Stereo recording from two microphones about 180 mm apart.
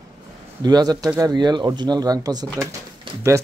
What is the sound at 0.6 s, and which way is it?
Speech, 20° right (ahead or behind).